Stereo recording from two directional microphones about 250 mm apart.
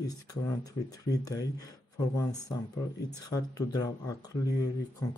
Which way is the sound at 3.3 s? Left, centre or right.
Centre.